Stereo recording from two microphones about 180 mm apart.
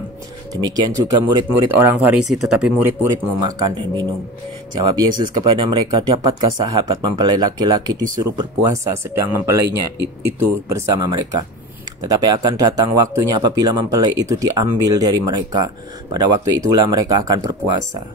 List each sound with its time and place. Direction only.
0.5 s speech: 20° right (ahead or behind); by 2.7 s 5° right (ahead or behind)
3.3 s speech: 25° right (ahead or behind)
10.7 s speech: 20° right (ahead or behind)